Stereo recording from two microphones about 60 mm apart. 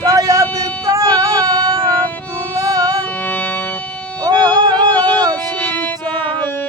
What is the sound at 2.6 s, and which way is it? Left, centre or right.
Music, right.